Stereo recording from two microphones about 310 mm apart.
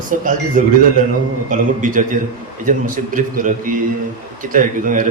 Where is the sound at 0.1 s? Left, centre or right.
Right.